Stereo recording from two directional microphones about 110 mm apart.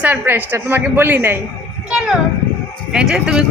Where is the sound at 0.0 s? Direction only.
15° right (ahead or behind).